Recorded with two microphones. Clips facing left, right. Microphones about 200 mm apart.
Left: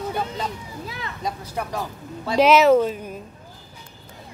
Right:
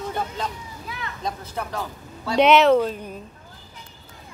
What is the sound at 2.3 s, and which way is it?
Speech, centre (ahead or behind).